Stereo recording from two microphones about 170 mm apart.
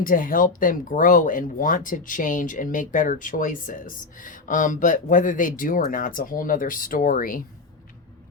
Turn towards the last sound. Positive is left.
turn(degrees=55)  # may be behind; listen again after turning